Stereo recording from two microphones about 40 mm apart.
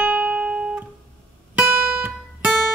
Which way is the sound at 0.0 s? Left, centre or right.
Right.